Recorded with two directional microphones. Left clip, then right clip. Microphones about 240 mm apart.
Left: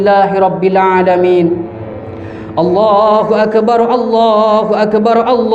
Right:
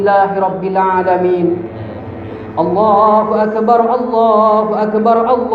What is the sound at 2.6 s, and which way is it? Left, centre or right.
Speech, left.